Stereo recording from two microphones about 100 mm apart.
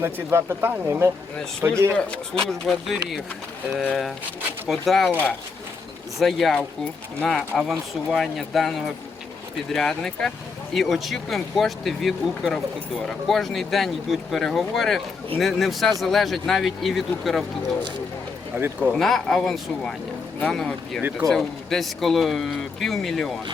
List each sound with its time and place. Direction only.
0.0 s speech: 25° right (ahead or behind)
2.0 s speech: 10° left (ahead or behind)
4.7 s speech: centre (ahead or behind)
6.1 s speech: centre (ahead or behind)
18.5 s speech: 15° right (ahead or behind)
18.9 s speech: centre (ahead or behind)